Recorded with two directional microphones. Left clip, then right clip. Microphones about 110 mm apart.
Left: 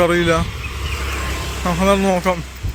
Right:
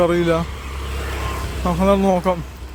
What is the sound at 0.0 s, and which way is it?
Speech, 10° right (ahead or behind).